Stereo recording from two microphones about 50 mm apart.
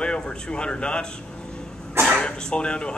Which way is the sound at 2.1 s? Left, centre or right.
Centre.